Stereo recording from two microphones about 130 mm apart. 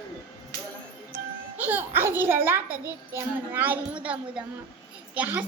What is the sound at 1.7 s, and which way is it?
A child's voice, 15° right (ahead or behind).